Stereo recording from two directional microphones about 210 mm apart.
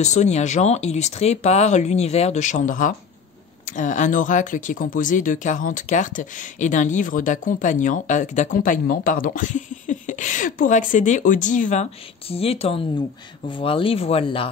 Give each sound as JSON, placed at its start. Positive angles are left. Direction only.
{"t": 0.0, "sound": "speech", "side_deg": 35}